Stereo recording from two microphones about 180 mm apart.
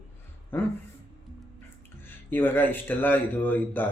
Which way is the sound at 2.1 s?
10° left (ahead or behind).